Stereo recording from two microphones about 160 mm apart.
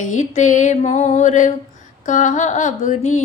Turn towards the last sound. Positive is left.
turn(degrees=50)  # may be behind; listen again after turning